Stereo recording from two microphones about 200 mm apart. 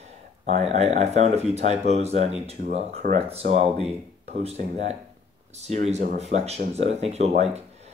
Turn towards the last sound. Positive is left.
turn(degrees=-30)  # may be behind; listen again after turning